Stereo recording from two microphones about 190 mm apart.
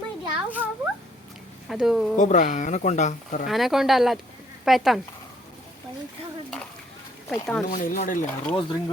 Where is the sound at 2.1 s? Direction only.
40° left (ahead or behind).